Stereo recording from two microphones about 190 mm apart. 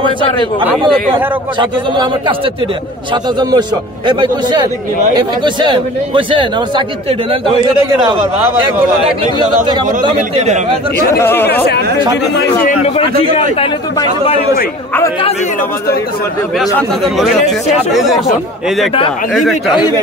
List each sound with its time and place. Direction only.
1.1 s a man's voice: 25° right (ahead or behind)
3.3 s a man's voice: 25° right (ahead or behind)
9.7 s a man's voice: 25° right (ahead or behind)
10.1 s speech: 35° right (ahead or behind)
11.1 s speech: 15° left (ahead or behind)
12.8 s a man's voice: 30° left (ahead or behind)
17.2 s speech: centre (ahead or behind)